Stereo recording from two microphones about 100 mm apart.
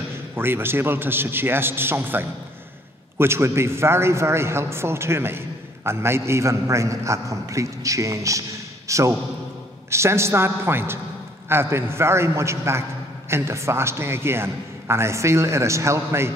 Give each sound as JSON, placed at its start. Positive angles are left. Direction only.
{"t": 0.4, "sound": "a man's voice", "side_deg": -20}